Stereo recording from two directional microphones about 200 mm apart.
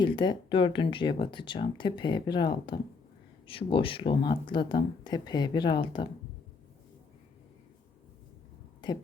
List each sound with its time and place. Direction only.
0.0 s speech: 20° left (ahead or behind)